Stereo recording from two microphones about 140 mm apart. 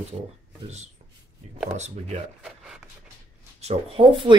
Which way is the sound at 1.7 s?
50° right (ahead or behind).